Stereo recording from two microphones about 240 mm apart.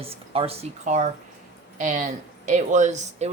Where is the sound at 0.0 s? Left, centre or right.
Right.